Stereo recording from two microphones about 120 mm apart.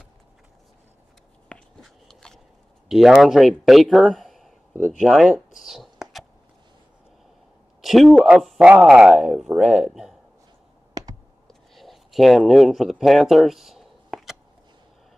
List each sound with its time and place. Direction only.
1.5 s biting: 5° left (ahead or behind)
2.9 s speech: 5° right (ahead or behind)
5.6 s a sound: 5° right (ahead or behind)
7.8 s speech: centre (ahead or behind)
11.0 s computer keyboard: 30° right (ahead or behind)
11.4 s a sound: centre (ahead or behind)